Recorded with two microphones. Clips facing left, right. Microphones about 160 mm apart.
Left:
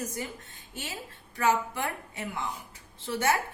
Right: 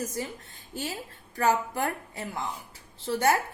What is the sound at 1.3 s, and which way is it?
A woman's voice, 40° right (ahead or behind).